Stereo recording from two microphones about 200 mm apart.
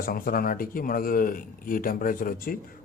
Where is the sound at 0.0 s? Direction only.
45° left (ahead or behind).